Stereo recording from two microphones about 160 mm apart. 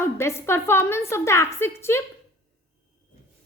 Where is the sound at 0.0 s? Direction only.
15° left (ahead or behind).